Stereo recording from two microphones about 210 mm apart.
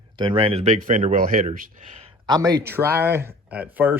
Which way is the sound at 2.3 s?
15° right (ahead or behind).